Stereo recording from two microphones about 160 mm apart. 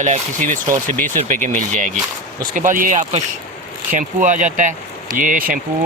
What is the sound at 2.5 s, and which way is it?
Speech, 55° right (ahead or behind).